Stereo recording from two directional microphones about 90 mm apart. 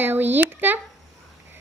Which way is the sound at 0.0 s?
20° right (ahead or behind).